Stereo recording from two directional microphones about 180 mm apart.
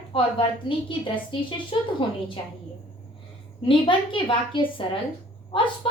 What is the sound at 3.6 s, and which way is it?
A woman's voice, 30° left (ahead or behind).